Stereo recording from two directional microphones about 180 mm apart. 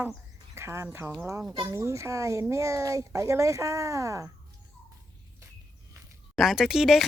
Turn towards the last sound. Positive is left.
turn(degrees=0)  # may be behind; listen again after turning